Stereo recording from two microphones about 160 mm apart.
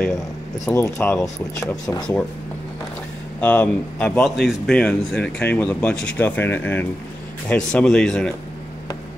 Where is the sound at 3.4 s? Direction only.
10° left (ahead or behind).